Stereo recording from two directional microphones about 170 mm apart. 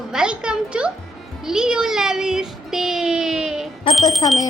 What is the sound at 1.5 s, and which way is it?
Child singing, 5° right (ahead or behind).